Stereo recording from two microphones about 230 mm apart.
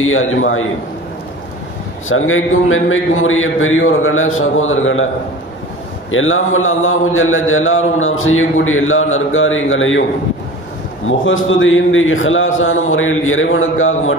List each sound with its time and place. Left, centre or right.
0.0 s a man's voice: left
2.0 s a man's voice: left
6.0 s a man's voice: left
11.1 s a man's voice: left